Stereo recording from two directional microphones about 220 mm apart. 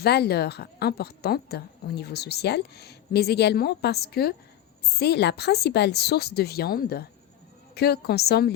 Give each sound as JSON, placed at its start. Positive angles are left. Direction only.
{"t": 0.0, "sound": "a woman's voice", "side_deg": 45}